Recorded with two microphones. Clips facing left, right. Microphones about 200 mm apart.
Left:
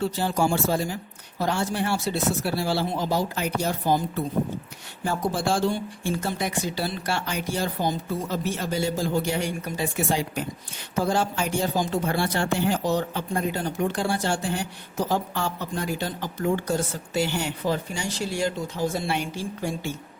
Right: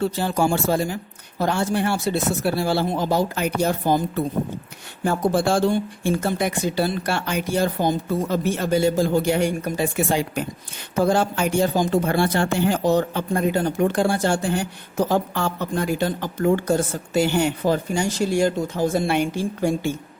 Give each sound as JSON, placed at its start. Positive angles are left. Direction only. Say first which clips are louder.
{"t": 0.0, "sound": "speech", "louder": "right 3 dB", "side_deg": -55}
{"t": 5.0, "sound": "speech", "louder": "right 5 dB", "side_deg": -55}